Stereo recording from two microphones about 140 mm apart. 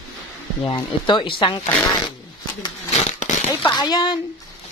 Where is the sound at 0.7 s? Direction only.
35° left (ahead or behind).